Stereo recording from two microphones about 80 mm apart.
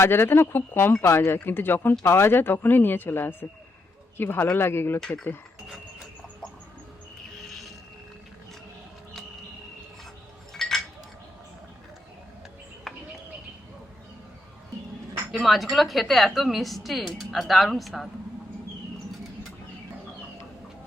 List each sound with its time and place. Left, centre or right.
0.0 s speech: left
4.9 s speech: centre
7.3 s insect: centre
10.5 s chink: centre
12.9 s bird: centre
15.3 s speech: centre